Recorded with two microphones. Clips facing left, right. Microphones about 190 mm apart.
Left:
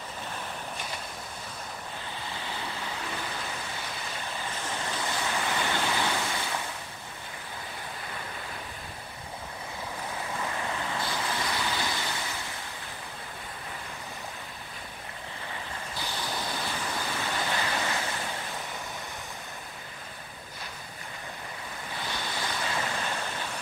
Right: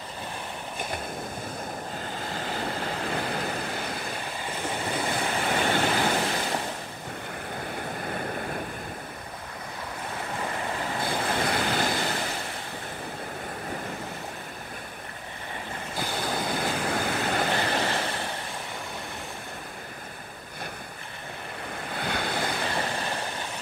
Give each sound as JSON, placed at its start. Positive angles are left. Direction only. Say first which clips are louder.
{"t": 2.2, "sound": "waves", "louder": "right 6 dB", "side_deg": -45}
{"t": 4.9, "sound": "waves", "louder": "right 3 dB", "side_deg": -55}
{"t": 8.1, "sound": "waves", "louder": "right 8 dB", "side_deg": -50}
{"t": 11.0, "sound": "vehicle", "louder": "right 5 dB", "side_deg": -55}
{"t": 16.0, "sound": "vehicle", "louder": "right 6 dB", "side_deg": -50}
{"t": 21.9, "sound": "waves", "louder": "right 6 dB", "side_deg": -60}